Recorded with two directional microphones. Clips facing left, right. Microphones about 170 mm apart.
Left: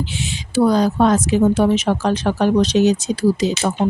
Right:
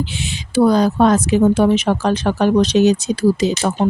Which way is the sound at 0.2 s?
60° right (ahead or behind).